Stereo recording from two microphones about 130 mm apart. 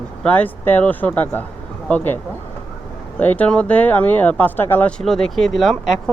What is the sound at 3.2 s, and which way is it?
Speech, 10° left (ahead or behind).